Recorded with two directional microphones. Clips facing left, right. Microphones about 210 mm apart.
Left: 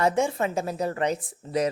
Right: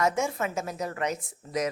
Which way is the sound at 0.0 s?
30° left (ahead or behind).